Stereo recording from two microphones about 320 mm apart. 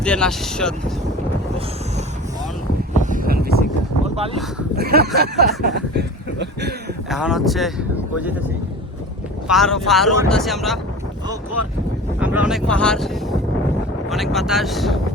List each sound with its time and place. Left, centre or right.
0.0 s speech: centre
3.0 s vehicle: right
4.0 s a sound: centre
4.8 s speech: right
7.1 s speech: centre
9.5 s speech: centre
12.2 s speech: centre
14.1 s speech: centre